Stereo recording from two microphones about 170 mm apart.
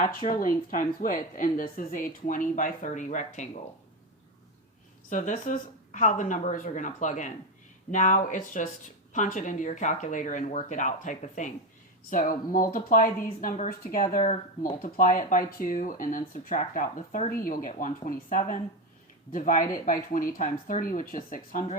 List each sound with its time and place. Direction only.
0.2 s speech: 50° left (ahead or behind)
5.0 s speech: 50° left (ahead or behind)